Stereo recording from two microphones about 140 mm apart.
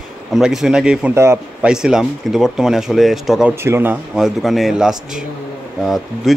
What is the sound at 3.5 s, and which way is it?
Speech, 20° right (ahead or behind).